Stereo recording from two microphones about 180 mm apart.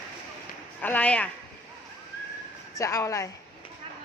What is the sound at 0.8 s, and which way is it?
Speech, 10° left (ahead or behind).